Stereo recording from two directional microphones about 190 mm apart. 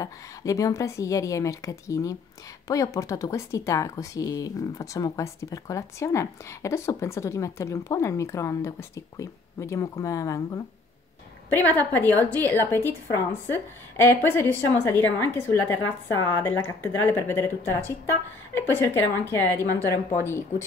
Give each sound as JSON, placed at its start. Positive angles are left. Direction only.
{"t": 0.0, "sound": "speech", "side_deg": 20}